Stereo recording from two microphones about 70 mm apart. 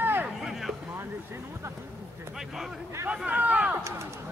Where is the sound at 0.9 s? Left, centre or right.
Right.